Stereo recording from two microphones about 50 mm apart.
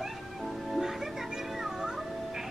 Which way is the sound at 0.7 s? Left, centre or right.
Centre.